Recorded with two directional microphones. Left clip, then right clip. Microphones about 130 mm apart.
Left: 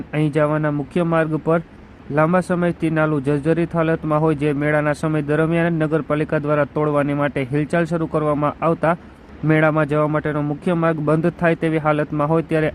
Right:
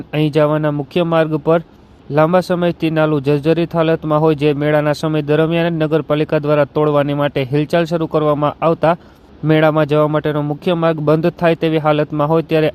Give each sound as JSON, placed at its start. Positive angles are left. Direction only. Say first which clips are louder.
{"t": 0.1, "sound": "speech", "louder": "right 5 dB", "side_deg": -40}